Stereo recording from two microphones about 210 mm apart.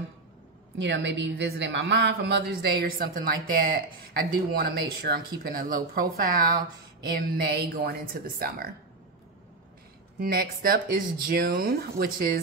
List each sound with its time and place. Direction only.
0.7 s a woman's voice: 60° right (ahead or behind)
10.1 s speech: 45° right (ahead or behind)